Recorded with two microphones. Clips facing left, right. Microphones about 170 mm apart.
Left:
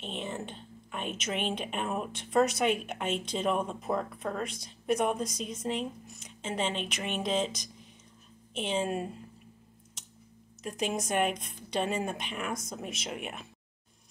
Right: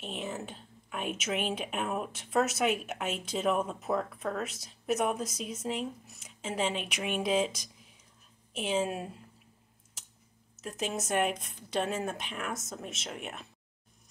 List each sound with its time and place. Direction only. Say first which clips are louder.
0.0 s a woman's voice: even; 5° right (ahead or behind)
10.6 s a woman's voice: left 2 dB; centre (ahead or behind)